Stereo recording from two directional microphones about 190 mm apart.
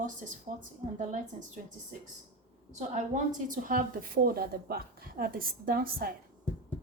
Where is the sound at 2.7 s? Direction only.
40° right (ahead or behind).